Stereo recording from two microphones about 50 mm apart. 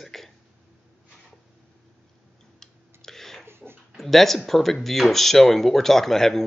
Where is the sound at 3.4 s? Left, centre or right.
Right.